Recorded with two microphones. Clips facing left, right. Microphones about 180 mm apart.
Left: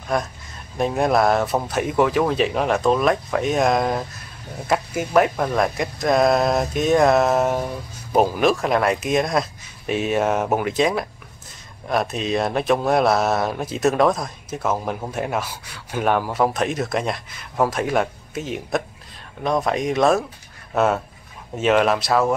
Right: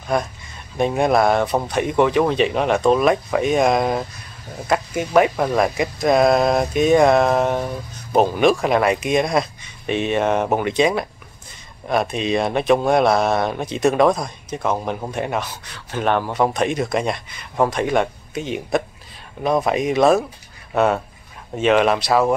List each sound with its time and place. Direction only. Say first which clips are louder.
0.1 s speech: right 2 dB; centre (ahead or behind)